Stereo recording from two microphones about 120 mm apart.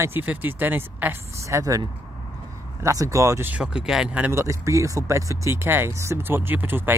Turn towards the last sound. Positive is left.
turn(degrees=-15)  # may be behind; listen again after turning